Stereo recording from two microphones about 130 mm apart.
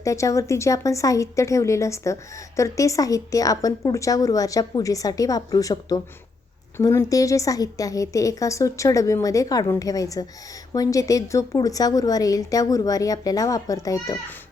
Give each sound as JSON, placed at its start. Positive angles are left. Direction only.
{"t": 0.0, "sound": "speech", "side_deg": 25}